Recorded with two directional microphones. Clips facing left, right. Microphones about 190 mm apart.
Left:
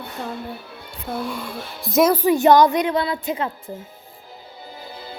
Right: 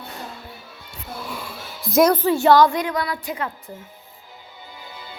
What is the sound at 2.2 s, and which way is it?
A woman's voice, 20° left (ahead or behind).